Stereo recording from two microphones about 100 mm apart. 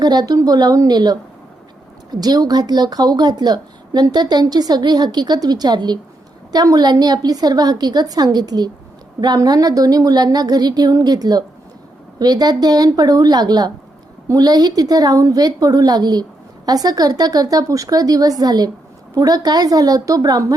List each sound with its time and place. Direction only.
0.0 s a woman's voice: 45° right (ahead or behind)